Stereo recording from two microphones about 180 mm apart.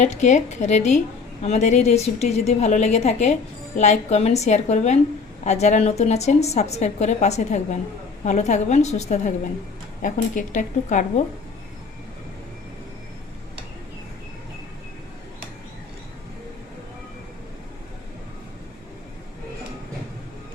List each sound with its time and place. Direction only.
0.0 s a woman's voice: 40° left (ahead or behind)